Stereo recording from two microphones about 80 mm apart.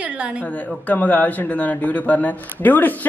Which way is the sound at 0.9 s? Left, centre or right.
Centre.